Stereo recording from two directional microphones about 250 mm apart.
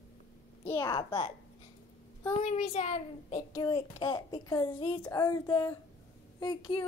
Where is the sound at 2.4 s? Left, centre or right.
Left.